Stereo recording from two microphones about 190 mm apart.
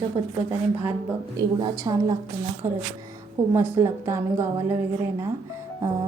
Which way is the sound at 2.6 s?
10° right (ahead or behind).